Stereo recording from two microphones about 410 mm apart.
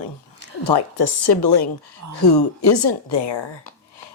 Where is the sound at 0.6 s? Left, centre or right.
Left.